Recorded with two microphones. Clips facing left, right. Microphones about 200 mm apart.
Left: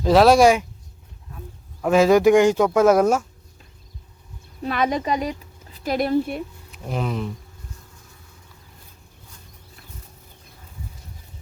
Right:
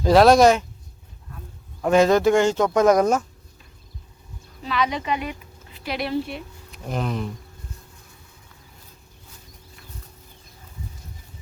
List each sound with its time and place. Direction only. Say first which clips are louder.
0.0 s speech: even; centre (ahead or behind)
1.8 s speech: left 2 dB; 5° left (ahead or behind)
4.6 s speech: left 3 dB; 50° left (ahead or behind)
6.7 s speech: right 1 dB; centre (ahead or behind)